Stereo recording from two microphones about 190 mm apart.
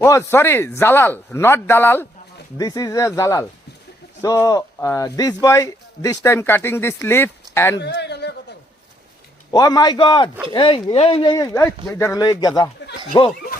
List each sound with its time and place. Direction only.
0.0 s speech: 15° left (ahead or behind)
7.8 s a sound: 65° left (ahead or behind)
9.5 s speech: 20° left (ahead or behind)